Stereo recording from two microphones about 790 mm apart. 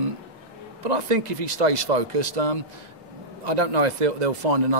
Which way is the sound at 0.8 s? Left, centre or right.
Right.